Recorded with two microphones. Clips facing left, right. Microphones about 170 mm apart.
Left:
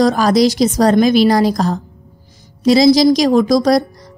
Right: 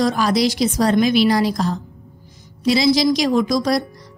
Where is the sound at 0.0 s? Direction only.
40° left (ahead or behind).